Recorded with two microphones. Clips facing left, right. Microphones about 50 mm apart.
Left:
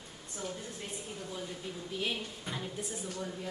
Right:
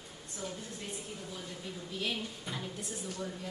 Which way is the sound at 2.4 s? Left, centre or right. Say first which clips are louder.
Left 1 dB; centre.